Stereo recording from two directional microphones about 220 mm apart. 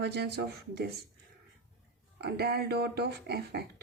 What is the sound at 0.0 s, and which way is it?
Speech, 50° right (ahead or behind).